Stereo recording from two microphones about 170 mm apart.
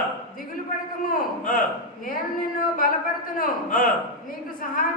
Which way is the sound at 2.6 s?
55° left (ahead or behind).